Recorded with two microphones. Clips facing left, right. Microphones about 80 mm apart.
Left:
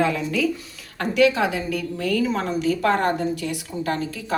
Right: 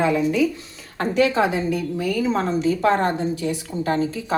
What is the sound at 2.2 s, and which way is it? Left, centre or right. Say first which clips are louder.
Speech: right 2 dB; right.